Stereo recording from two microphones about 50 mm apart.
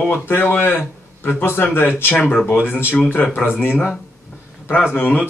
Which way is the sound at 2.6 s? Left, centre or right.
Left.